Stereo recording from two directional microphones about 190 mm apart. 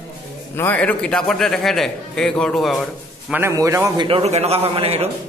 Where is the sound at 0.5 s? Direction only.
10° left (ahead or behind).